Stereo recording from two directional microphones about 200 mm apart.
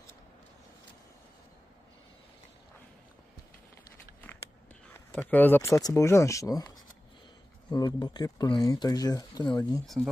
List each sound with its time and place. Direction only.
5.2 s speech: 10° left (ahead or behind)